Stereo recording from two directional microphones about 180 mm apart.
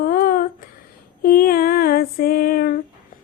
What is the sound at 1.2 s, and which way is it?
Female singing, 55° left (ahead or behind).